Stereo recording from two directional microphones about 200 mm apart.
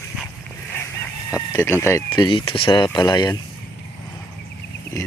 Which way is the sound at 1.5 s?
10° left (ahead or behind).